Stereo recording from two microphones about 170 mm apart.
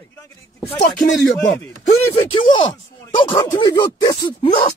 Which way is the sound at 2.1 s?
25° left (ahead or behind).